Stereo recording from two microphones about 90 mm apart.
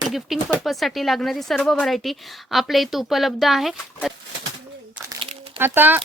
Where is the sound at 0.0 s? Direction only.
5° right (ahead or behind).